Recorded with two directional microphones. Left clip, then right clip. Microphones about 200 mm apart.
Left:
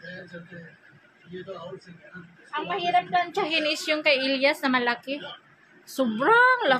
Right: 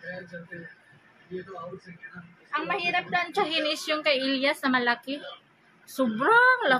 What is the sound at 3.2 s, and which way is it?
A woman's voice, 15° left (ahead or behind).